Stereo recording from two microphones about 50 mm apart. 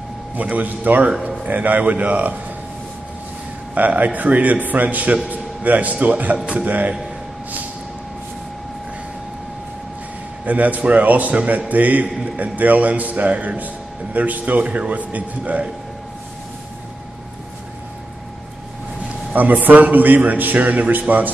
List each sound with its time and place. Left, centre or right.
0.4 s a man's voice: right
1.0 s a man's voice: right
1.4 s a man's voice: right
3.7 s a man's voice: right
10.4 s a man's voice: right
19.3 s a man's voice: right